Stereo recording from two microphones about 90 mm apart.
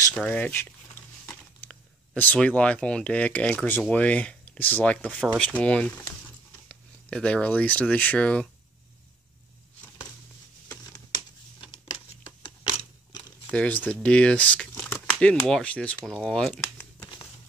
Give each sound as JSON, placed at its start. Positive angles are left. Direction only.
{"t": 0.1, "sound": "speech", "side_deg": 15}
{"t": 11.6, "sound": "a sound", "side_deg": 65}
{"t": 13.5, "sound": "speech", "side_deg": 15}